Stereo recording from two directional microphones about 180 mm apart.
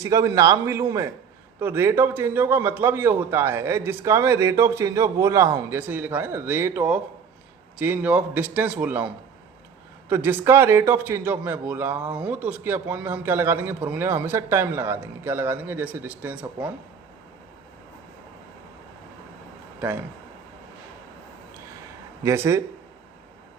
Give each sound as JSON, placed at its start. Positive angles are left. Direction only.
{"t": 0.0, "sound": "speech", "side_deg": -20}
{"t": 22.2, "sound": "speech", "side_deg": -15}